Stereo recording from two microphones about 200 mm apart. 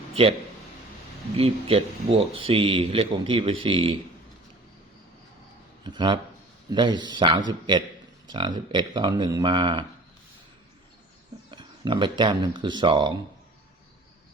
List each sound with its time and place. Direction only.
0.1 s speech: 30° right (ahead or behind)
1.4 s a man's voice: 30° right (ahead or behind)
5.8 s a man's voice: 20° right (ahead or behind)
11.5 s a man's voice: 25° right (ahead or behind)